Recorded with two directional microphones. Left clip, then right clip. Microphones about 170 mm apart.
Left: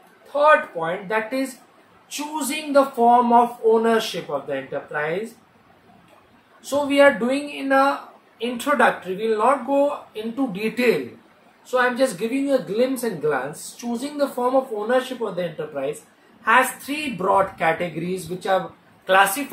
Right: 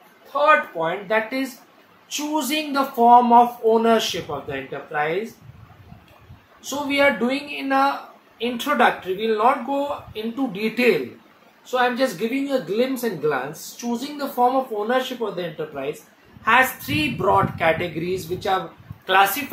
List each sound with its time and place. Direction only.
0.3 s speech: 20° right (ahead or behind)
6.6 s speech: 15° right (ahead or behind)